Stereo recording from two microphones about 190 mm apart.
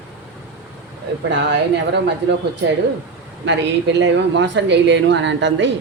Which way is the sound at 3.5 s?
65° right (ahead or behind).